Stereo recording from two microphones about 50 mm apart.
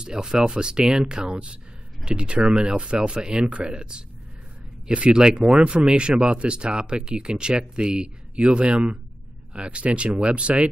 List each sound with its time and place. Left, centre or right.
0.0 s speech: centre